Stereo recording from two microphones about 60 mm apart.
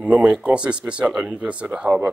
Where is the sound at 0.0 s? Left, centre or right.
Right.